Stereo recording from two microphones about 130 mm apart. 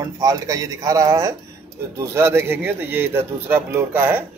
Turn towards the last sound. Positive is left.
turn(degrees=-15)  # may be behind; listen again after turning